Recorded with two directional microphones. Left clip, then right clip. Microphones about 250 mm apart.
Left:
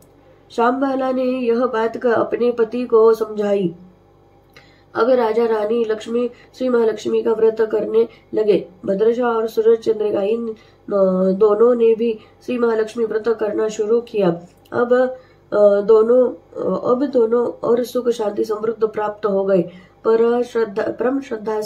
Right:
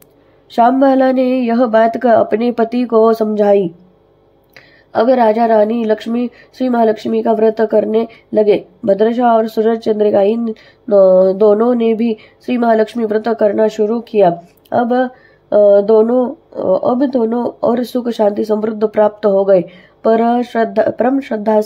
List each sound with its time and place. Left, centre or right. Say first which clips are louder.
0.5 s speech: right 7 dB; right